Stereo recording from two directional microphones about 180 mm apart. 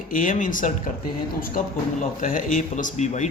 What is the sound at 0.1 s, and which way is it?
Speech, 50° left (ahead or behind).